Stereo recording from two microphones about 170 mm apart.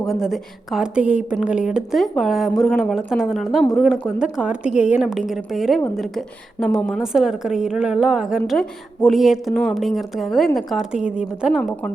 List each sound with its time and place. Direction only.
0.1 s a woman's voice: centre (ahead or behind)